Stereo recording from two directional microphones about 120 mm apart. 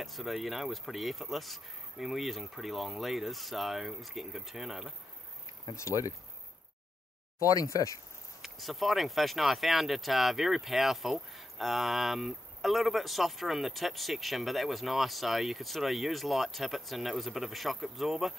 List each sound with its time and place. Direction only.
0.0 s speech: centre (ahead or behind)
5.8 s speech: 25° left (ahead or behind)
7.3 s speech: 30° left (ahead or behind)
8.4 s speech: centre (ahead or behind)